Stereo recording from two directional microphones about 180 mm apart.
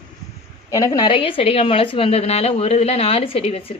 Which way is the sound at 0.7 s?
20° left (ahead or behind).